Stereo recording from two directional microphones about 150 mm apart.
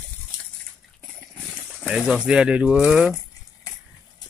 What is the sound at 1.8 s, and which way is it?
Speech, 5° right (ahead or behind).